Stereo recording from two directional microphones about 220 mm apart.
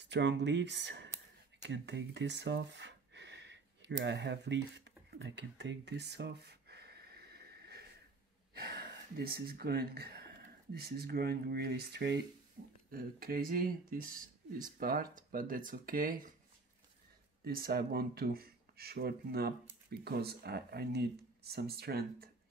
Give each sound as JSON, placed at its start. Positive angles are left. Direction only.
{"t": 0.0, "sound": "speech", "side_deg": -50}
{"t": 1.6, "sound": "a sound", "side_deg": -55}
{"t": 8.5, "sound": "speech", "side_deg": -45}
{"t": 17.5, "sound": "speech", "side_deg": -45}